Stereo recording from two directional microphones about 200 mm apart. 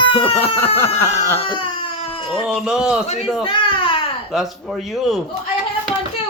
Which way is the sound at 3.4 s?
25° left (ahead or behind).